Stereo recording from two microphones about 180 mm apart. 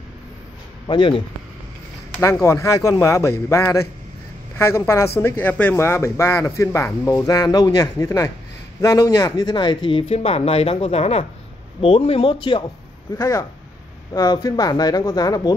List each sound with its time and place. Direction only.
0.8 s speech: 25° left (ahead or behind)
2.1 s speech: 15° left (ahead or behind)
13.1 s speech: 15° left (ahead or behind)